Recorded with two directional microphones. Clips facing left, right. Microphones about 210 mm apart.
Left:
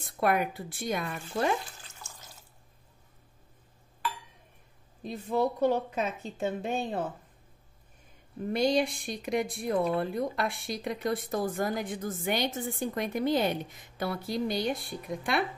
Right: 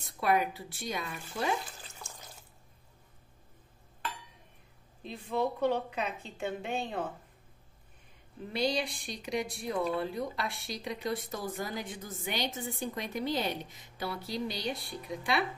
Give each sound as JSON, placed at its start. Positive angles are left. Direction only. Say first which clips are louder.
{"t": 0.2, "sound": "speech", "louder": "left 2 dB", "side_deg": 55}
{"t": 5.0, "sound": "a woman's voice", "louder": "left 4 dB", "side_deg": 40}
{"t": 8.5, "sound": "speech", "louder": "left 5 dB", "side_deg": 50}